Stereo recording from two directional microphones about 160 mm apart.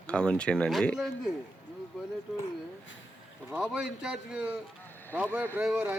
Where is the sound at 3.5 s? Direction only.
5° right (ahead or behind).